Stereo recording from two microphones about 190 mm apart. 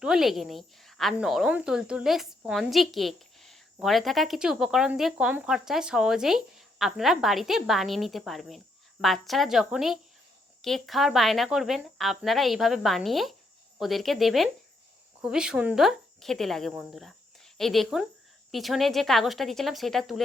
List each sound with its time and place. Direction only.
0.0 s speech: centre (ahead or behind)